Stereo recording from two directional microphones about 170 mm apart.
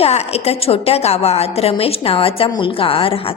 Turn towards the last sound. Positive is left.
turn(degrees=35)  # may be behind; listen again after turning